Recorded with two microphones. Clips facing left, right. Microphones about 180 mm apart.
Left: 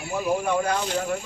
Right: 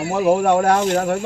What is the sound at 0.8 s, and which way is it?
Speech, 50° right (ahead or behind).